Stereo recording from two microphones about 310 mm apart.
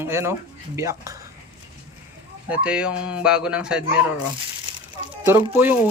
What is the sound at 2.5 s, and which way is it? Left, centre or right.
Speech, centre.